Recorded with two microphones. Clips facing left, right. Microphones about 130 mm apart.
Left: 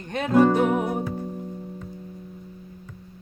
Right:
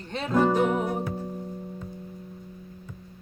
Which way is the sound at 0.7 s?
10° left (ahead or behind).